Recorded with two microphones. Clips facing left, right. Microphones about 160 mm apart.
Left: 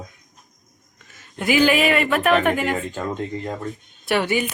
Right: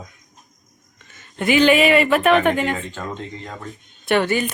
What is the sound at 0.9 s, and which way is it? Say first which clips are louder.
Speech: right 3 dB; 5° left (ahead or behind).